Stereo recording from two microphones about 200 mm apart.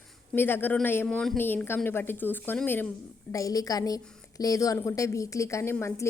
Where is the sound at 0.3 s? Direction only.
10° left (ahead or behind).